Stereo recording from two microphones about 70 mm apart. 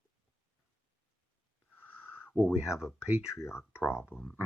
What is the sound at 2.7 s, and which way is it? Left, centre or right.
Speech, left.